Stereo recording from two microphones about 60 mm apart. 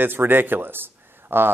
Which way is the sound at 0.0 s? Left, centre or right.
Right.